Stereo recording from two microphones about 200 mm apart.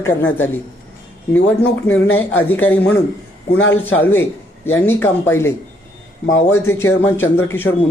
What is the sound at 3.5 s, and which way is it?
Speech, 80° left.